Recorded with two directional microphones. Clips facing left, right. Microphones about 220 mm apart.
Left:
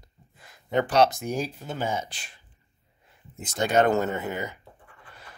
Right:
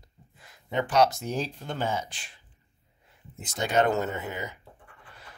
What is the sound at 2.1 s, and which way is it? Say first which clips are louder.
Speech: left 2 dB; 35° left (ahead or behind).